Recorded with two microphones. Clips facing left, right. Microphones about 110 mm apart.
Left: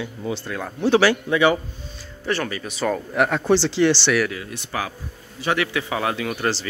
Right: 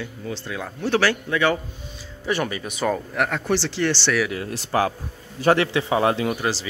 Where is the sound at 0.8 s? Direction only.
15° left (ahead or behind).